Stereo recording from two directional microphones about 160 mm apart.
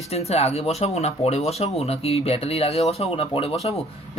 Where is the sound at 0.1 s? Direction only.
40° left (ahead or behind).